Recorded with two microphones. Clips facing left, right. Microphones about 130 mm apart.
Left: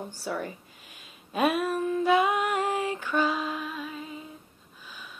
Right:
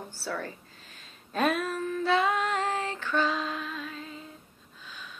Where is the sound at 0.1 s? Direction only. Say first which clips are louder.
Left 2 dB; 15° left (ahead or behind).